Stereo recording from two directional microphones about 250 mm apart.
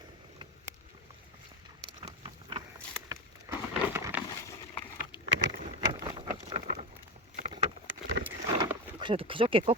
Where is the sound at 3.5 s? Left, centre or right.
Centre.